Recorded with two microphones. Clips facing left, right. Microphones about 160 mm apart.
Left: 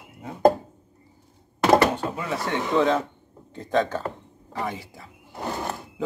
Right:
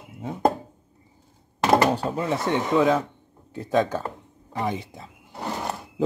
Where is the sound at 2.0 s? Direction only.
35° right (ahead or behind).